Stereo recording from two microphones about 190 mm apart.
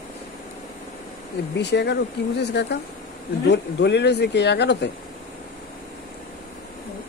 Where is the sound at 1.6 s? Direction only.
60° left (ahead or behind).